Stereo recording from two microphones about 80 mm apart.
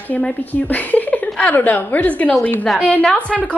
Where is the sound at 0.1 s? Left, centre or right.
Centre.